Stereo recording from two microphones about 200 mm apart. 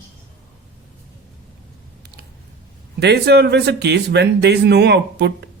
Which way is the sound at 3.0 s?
55° right (ahead or behind).